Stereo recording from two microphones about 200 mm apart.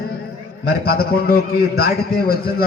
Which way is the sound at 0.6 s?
50° left (ahead or behind).